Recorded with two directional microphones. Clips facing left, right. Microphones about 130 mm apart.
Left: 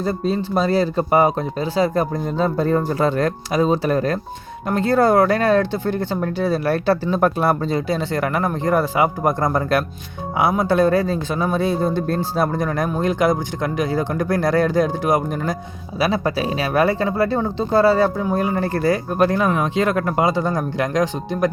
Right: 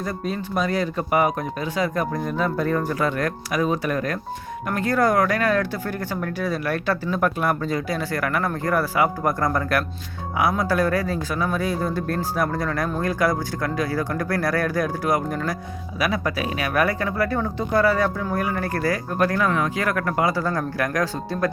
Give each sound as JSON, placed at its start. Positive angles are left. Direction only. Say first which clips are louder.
{"t": 0.0, "sound": "speech", "louder": "left 6 dB", "side_deg": 30}